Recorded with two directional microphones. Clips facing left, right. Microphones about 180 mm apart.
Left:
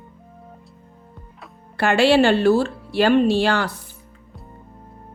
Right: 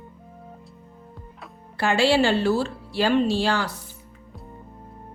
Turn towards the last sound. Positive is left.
turn(degrees=60)  # may be behind; listen again after turning